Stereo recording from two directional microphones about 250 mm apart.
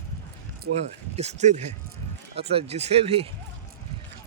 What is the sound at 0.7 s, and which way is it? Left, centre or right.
Speech, right.